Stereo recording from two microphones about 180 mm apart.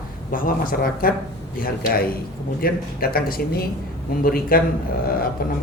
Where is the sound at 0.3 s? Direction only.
50° left (ahead or behind).